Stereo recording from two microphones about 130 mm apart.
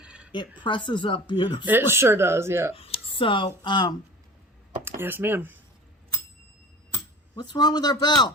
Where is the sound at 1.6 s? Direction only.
15° right (ahead or behind).